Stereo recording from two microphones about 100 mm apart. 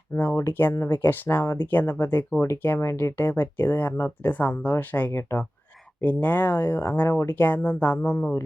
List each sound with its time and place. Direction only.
0.1 s speech: 25° left (ahead or behind)